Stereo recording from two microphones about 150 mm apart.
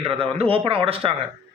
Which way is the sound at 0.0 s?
35° right (ahead or behind).